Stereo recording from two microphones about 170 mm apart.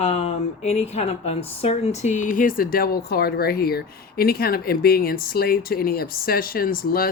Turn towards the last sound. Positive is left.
turn(degrees=60)  # may be behind; listen again after turning